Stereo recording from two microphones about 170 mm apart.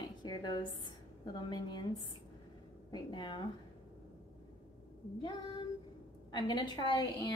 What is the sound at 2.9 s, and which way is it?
Speech, 25° left (ahead or behind).